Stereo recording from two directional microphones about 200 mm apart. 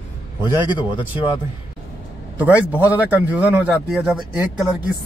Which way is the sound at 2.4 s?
10° right (ahead or behind).